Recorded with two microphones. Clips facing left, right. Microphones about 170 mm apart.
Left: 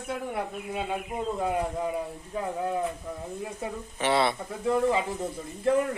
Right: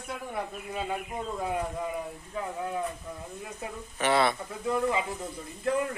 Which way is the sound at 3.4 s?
25° left (ahead or behind).